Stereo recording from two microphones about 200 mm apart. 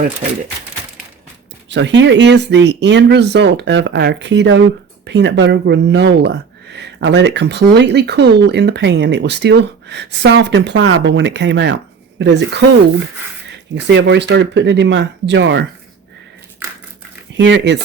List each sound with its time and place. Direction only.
1.7 s speech: 65° right (ahead or behind)
17.3 s speech: 60° right (ahead or behind)